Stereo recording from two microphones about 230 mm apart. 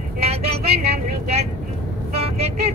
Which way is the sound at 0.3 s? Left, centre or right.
Right.